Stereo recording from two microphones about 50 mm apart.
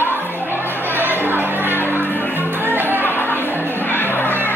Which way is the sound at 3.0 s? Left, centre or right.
Left.